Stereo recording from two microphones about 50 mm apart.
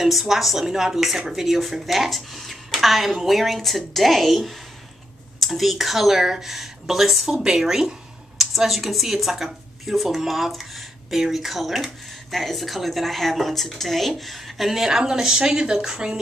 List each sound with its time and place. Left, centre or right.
0.0 s speech: centre